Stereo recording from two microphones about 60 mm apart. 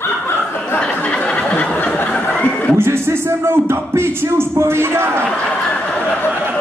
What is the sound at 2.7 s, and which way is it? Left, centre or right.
Speech, right.